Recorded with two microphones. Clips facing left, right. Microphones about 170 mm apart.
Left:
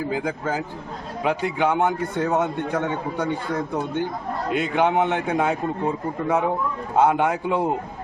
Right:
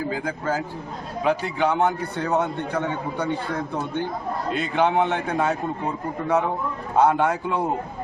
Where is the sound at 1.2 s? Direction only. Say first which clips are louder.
Even; 15° left (ahead or behind).